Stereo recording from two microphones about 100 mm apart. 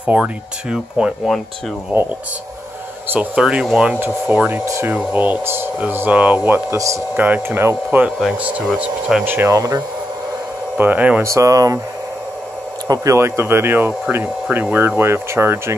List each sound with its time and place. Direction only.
0.0 s speech: 10° right (ahead or behind)
3.1 s speech: 10° right (ahead or behind)
4.6 s speech: 30° right (ahead or behind)
4.9 s speech: 15° right (ahead or behind)
7.2 s speech: 20° right (ahead or behind)
9.5 s speech: 35° right (ahead or behind)
10.8 s speech: 15° right (ahead or behind)
11.2 s speech: 35° right (ahead or behind)
12.8 s speech: 35° right (ahead or behind)